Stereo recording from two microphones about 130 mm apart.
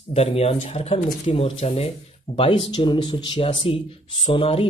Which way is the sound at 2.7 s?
35° left (ahead or behind).